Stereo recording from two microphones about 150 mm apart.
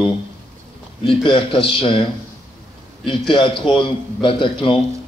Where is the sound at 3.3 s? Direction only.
35° left (ahead or behind).